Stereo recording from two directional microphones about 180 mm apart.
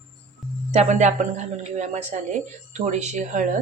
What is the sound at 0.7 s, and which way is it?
A woman's voice, 40° right (ahead or behind).